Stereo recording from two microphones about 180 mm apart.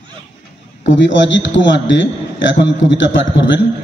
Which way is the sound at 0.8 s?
90° left.